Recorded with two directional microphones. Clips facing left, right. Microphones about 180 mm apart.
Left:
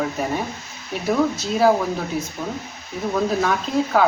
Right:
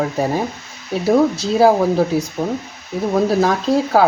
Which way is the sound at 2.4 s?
35° right (ahead or behind).